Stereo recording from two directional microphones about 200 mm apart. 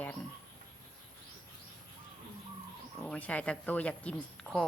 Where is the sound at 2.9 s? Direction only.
5° left (ahead or behind).